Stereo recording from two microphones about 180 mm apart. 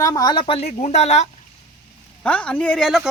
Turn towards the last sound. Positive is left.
turn(degrees=0)  # may be behind; listen again after turning